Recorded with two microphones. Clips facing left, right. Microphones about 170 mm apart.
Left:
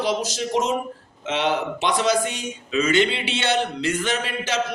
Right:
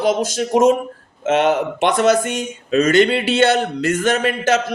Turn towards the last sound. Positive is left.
turn(degrees=-50)  # may be behind; listen again after turning